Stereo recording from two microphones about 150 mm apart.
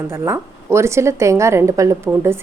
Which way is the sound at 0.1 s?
20° right (ahead or behind).